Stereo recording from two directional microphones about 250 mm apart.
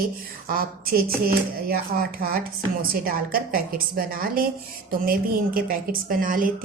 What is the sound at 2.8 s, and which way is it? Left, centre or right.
A woman's voice, right.